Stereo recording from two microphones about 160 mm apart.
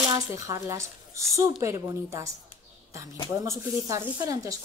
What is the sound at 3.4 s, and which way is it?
Speech, 20° right (ahead or behind).